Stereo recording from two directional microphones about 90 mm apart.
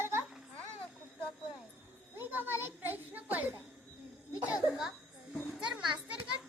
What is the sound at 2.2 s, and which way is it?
Children playing, 25° right (ahead or behind).